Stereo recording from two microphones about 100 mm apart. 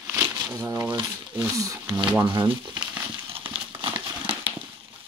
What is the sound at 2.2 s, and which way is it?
Speech, 50° right (ahead or behind).